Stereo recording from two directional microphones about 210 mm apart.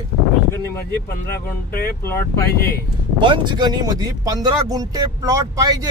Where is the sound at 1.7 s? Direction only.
45° left (ahead or behind).